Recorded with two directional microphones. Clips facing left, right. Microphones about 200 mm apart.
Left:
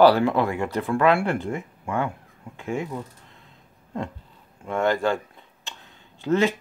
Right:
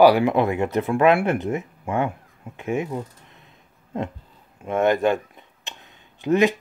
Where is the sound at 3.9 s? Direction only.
20° right (ahead or behind).